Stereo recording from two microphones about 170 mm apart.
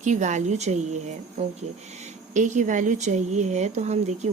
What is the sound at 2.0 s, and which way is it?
Speech, 45° right (ahead or behind).